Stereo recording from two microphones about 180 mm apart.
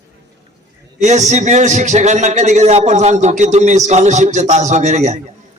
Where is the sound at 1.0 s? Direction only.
40° right (ahead or behind).